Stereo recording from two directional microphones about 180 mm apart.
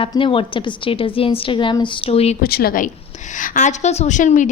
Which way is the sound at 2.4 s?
60° left (ahead or behind).